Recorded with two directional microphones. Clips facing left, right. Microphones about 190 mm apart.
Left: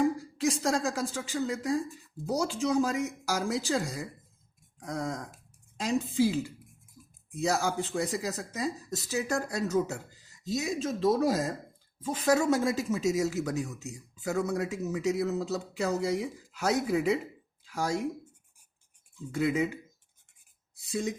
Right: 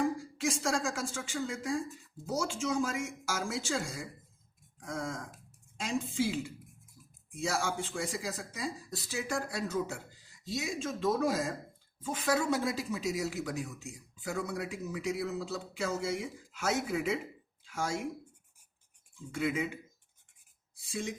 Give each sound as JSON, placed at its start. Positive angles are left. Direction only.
{"t": 0.2, "sound": "speech", "side_deg": 40}
{"t": 19.3, "sound": "speech", "side_deg": 40}